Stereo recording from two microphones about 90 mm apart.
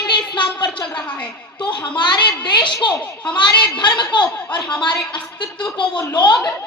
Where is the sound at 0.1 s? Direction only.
60° left (ahead or behind).